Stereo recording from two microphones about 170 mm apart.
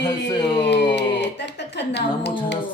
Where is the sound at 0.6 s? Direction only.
90° left.